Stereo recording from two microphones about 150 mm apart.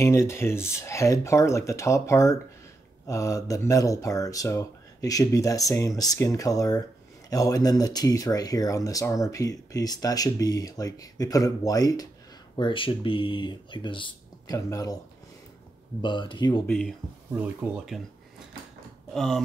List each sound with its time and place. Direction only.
0.0 s speech: 15° left (ahead or behind)
16.0 s speech: 30° left (ahead or behind)
17.4 s speech: centre (ahead or behind)
19.1 s speech: 5° left (ahead or behind)